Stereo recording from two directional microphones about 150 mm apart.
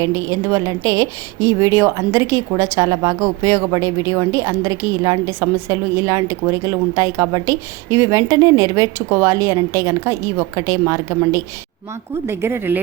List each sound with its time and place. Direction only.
0.0 s a woman's voice: 20° right (ahead or behind)